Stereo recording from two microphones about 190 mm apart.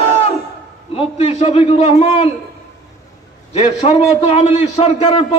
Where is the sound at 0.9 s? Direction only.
30° left (ahead or behind).